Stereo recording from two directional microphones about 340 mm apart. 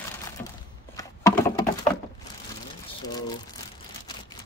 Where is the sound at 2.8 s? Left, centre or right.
Centre.